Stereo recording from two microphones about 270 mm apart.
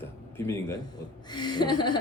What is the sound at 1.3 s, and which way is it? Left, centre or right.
Speech, centre.